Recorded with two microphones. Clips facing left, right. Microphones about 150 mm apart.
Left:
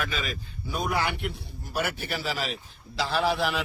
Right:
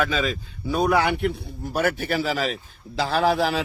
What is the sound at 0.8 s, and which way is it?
Speech, 70° right (ahead or behind).